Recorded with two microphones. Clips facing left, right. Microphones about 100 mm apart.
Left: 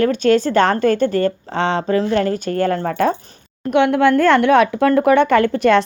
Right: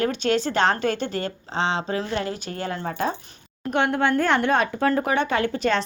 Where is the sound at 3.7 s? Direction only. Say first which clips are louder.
Left 8 dB; 80° left; by 5.8 s 60° left (ahead or behind).